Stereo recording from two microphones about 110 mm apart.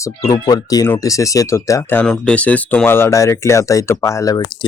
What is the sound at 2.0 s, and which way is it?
Speech, 5° left (ahead or behind).